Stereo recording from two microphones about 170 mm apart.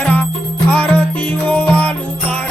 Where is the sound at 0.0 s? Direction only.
10° left (ahead or behind).